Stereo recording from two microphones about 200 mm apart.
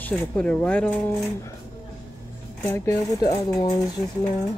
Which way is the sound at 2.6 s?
10° left (ahead or behind).